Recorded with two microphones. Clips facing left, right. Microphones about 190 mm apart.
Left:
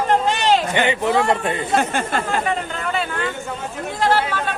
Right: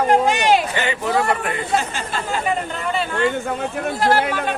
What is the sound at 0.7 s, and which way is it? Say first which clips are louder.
Speech: left 3 dB; 20° left (ahead or behind).